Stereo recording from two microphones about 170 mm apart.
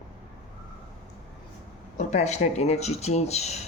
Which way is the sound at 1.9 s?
40° left (ahead or behind).